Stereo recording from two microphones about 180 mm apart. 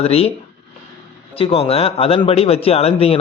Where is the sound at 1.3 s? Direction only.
30° left (ahead or behind).